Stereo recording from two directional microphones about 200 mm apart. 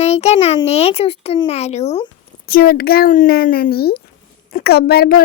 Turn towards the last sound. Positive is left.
turn(degrees=50)  # may be behind; listen again after turning